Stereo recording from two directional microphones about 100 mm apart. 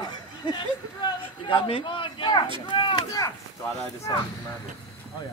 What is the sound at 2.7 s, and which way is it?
Speech, 50° left (ahead or behind).